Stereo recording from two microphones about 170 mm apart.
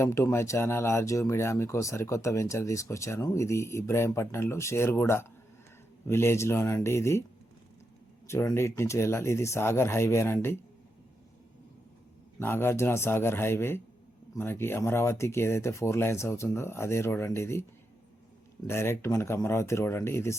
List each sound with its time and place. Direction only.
0.0 s speech: 15° left (ahead or behind)
8.3 s speech: 15° left (ahead or behind)
12.4 s speech: 15° left (ahead or behind)
18.7 s speech: 15° left (ahead or behind)